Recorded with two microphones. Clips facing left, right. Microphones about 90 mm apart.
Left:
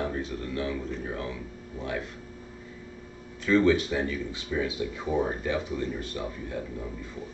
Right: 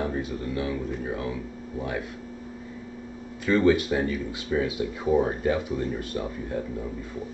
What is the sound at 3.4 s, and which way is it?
Speech, 10° right (ahead or behind).